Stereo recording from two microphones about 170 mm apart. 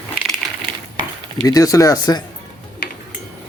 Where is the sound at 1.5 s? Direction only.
20° left (ahead or behind).